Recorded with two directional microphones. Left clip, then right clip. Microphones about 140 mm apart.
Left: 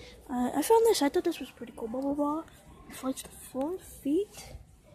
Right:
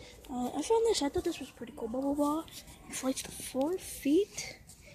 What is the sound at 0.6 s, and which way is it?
Speech, 40° left (ahead or behind).